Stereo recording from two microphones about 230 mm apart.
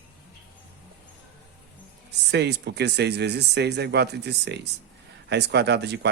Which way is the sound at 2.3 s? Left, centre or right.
Right.